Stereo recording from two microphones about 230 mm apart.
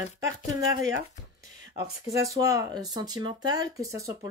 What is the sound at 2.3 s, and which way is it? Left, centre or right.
Speech, centre.